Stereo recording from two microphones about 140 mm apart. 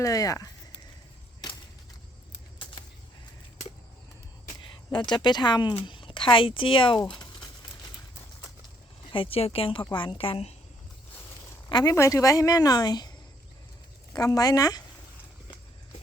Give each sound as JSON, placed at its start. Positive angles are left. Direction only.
{"t": 0.0, "sound": "a woman's voice", "side_deg": 25}
{"t": 4.9, "sound": "speech", "side_deg": 35}
{"t": 7.2, "sound": "crumpling", "side_deg": 30}
{"t": 9.1, "sound": "speech", "side_deg": 40}
{"t": 11.7, "sound": "a woman's voice", "side_deg": 25}
{"t": 14.1, "sound": "a woman's voice", "side_deg": 25}